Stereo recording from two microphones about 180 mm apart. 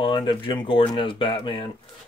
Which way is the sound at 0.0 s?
25° left (ahead or behind).